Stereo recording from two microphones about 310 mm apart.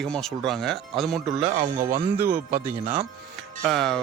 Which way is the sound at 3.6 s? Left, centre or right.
Centre.